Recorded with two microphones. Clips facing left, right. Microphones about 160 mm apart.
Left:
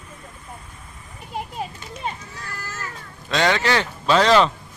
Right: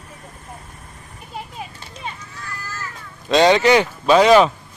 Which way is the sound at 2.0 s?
35° left (ahead or behind).